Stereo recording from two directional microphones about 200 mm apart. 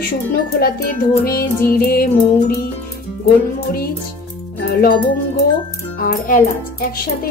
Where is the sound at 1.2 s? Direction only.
50° left (ahead or behind).